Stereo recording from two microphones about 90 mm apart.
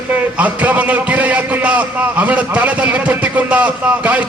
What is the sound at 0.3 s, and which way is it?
A man's voice, 15° right (ahead or behind).